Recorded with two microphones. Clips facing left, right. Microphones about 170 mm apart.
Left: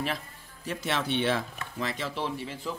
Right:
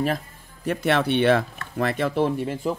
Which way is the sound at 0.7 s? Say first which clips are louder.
Right 9 dB; 60° right (ahead or behind).